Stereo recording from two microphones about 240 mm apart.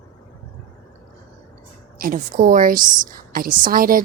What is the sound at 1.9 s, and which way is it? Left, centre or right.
Speech, right.